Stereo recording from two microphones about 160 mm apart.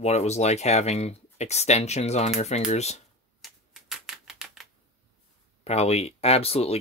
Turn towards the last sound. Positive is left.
turn(degrees=40)  # may be behind; listen again after turning